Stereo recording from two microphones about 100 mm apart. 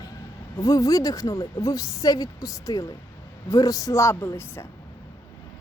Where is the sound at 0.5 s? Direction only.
35° left (ahead or behind).